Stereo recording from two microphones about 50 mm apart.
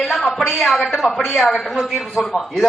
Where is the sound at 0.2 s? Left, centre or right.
Centre.